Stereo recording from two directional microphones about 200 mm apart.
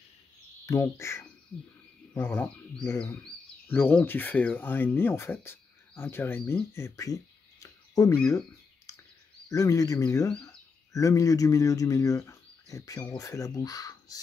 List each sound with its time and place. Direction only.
0.7 s speech: 15° left (ahead or behind)
7.6 s a sound: 15° left (ahead or behind)
9.5 s speech: 15° left (ahead or behind)